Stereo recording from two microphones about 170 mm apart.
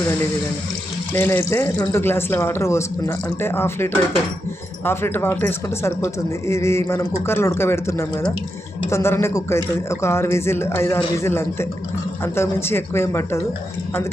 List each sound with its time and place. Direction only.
1.1 s speech: 15° left (ahead or behind)